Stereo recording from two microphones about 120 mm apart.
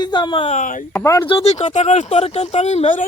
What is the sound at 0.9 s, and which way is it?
Speech, 25° left (ahead or behind).